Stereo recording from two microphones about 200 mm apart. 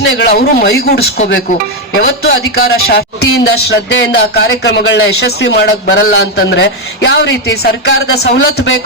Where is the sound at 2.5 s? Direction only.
50° left (ahead or behind).